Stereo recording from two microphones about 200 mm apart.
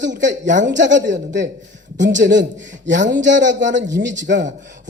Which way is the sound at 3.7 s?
40° right (ahead or behind).